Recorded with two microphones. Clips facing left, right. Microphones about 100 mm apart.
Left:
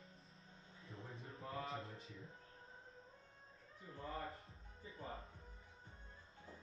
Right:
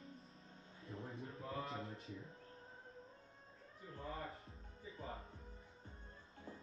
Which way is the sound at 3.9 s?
Centre (ahead or behind).